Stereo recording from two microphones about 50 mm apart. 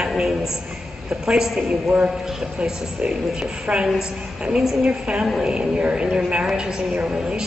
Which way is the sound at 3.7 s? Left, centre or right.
Centre.